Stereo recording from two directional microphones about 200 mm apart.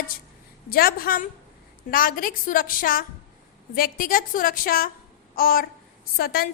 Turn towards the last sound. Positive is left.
turn(degrees=50)  # may be behind; listen again after turning